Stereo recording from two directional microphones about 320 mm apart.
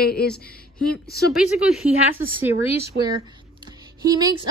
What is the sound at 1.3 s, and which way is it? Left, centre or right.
A woman's voice, centre.